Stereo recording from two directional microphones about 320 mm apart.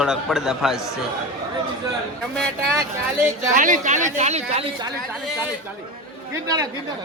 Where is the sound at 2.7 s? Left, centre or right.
Centre.